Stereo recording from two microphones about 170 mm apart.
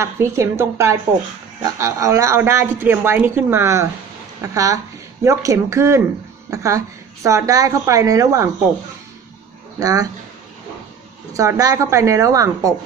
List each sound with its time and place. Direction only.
0.0 s a woman's voice: 15° right (ahead or behind)
9.8 s a woman's voice: 20° right (ahead or behind)
11.3 s a woman's voice: 20° right (ahead or behind)